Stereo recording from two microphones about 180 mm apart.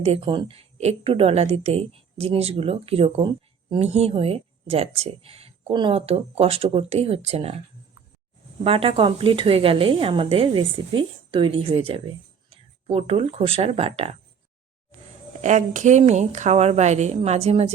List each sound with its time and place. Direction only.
0.0 s a woman's voice: 30° right (ahead or behind)
8.6 s a woman's voice: 30° right (ahead or behind)
15.4 s a woman's voice: 40° right (ahead or behind)